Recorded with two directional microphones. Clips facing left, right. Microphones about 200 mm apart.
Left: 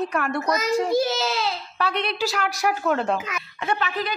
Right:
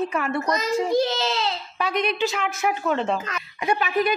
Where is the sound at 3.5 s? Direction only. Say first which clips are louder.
Right 4 dB; 15° right (ahead or behind).